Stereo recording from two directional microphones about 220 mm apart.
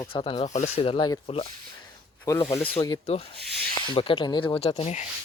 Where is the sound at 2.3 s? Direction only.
15° left (ahead or behind).